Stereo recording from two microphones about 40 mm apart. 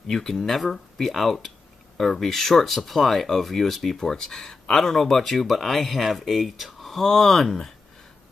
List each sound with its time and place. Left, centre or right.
0.0 s speech: centre